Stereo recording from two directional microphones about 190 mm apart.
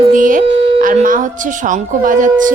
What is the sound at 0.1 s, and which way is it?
Speech, 45° right (ahead or behind).